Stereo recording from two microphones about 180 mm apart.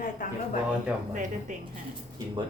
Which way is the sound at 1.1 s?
45° right (ahead or behind).